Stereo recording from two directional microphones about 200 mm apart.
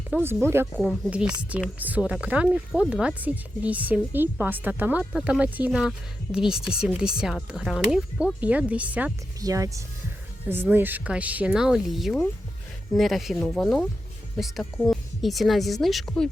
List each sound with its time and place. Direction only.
0.1 s speech: 10° right (ahead or behind)
0.8 s speech: 5° left (ahead or behind)